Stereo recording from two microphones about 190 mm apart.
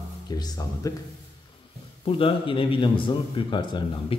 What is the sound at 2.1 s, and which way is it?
A man's voice, 30° left (ahead or behind).